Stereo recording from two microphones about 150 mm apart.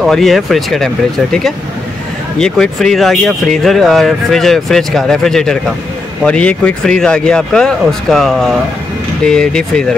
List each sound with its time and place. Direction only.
0.0 s speech: centre (ahead or behind)